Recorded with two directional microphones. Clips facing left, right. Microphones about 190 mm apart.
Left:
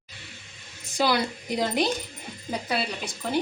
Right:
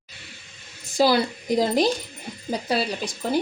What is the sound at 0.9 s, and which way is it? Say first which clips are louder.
Speech: right 5 dB; 35° right (ahead or behind).